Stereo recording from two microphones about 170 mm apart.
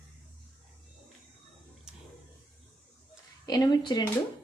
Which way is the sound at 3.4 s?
25° left (ahead or behind).